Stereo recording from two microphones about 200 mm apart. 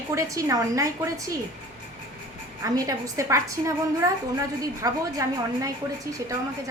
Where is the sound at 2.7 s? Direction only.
15° right (ahead or behind).